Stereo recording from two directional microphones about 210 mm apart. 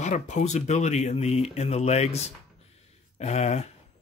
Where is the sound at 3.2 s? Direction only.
30° left (ahead or behind).